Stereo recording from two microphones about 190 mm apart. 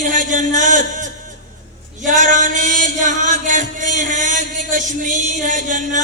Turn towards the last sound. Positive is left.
turn(degrees=-40)  # may be behind; listen again after turning